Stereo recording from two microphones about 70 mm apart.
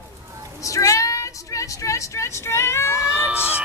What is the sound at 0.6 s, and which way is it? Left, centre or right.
A woman's voice, left.